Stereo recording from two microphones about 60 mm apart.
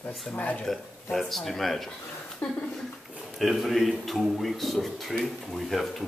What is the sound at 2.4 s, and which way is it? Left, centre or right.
Speech, left.